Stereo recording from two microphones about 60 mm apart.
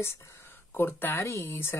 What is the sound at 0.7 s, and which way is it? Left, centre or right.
Speech, left.